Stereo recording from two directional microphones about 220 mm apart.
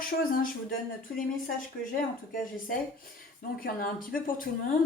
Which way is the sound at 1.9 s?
40° left (ahead or behind).